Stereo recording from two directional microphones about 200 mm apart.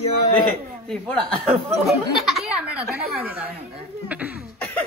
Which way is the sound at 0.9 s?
5° left (ahead or behind).